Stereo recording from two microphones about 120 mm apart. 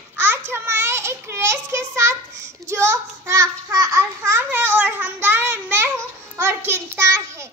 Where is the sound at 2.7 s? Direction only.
25° right (ahead or behind).